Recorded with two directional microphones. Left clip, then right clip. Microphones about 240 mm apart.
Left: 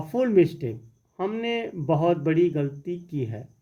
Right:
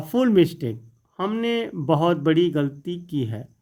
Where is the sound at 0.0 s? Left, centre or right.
Right.